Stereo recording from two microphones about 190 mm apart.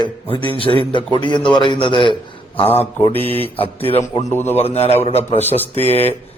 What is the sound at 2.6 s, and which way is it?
Speech, 10° left (ahead or behind).